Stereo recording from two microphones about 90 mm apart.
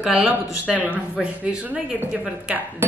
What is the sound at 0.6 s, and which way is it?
Speech, 15° right (ahead or behind).